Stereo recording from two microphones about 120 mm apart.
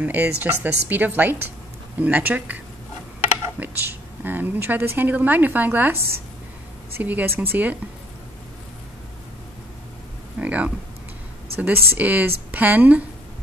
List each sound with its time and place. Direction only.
0.0 s a woman's voice: 15° right (ahead or behind)
10.4 s a sound: 10° right (ahead or behind)
11.5 s a woman's voice: 15° right (ahead or behind)